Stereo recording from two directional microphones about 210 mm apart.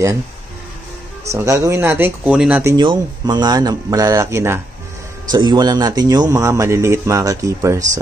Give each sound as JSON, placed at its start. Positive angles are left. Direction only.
{"t": 1.2, "sound": "speech", "side_deg": -15}
{"t": 2.8, "sound": "speech", "side_deg": -20}